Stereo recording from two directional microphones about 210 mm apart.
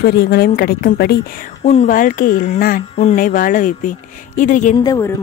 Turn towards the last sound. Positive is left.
turn(degrees=15)  # may be behind; listen again after turning